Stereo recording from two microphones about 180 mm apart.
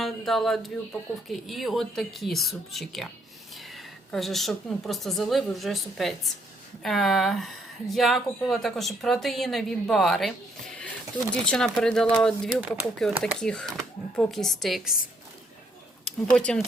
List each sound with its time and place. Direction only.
0.0 s a woman's voice: centre (ahead or behind)
16.0 s speech: 5° left (ahead or behind)